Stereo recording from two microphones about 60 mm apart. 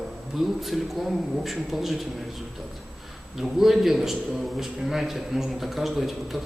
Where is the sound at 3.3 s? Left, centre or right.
Centre.